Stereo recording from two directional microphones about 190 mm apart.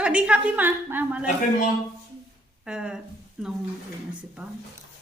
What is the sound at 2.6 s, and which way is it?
Speech, 5° right (ahead or behind).